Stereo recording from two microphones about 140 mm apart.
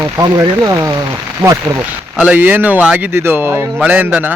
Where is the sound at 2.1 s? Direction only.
10° right (ahead or behind).